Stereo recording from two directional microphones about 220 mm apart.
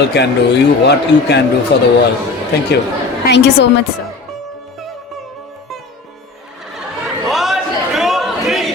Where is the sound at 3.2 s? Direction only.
50° left (ahead or behind).